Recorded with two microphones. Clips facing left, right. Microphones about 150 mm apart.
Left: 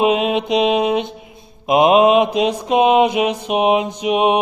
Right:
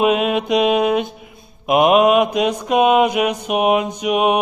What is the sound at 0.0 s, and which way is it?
Mantra, 30° left (ahead or behind).